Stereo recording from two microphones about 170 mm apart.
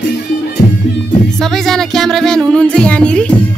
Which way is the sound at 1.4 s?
Centre (ahead or behind).